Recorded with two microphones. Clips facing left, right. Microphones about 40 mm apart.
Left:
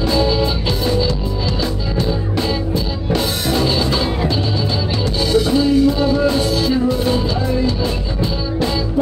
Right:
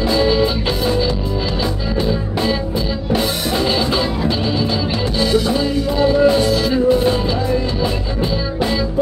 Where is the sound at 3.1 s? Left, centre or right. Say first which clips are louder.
Even; centre.